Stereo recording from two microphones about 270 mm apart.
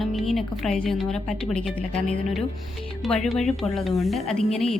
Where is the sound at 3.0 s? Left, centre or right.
Centre.